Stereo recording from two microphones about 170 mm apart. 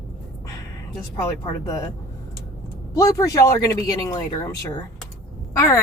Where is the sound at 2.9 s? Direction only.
20° left (ahead or behind).